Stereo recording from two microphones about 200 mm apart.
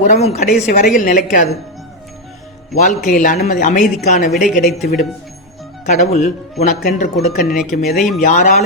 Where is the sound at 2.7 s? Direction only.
40° left (ahead or behind).